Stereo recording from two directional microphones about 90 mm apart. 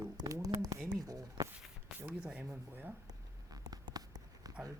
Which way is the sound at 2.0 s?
10° right (ahead or behind).